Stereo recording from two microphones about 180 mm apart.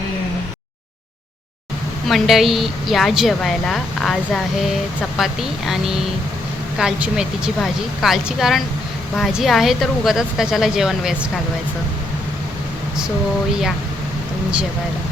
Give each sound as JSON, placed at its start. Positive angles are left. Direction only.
{"t": 2.0, "sound": "a woman's voice", "side_deg": 0}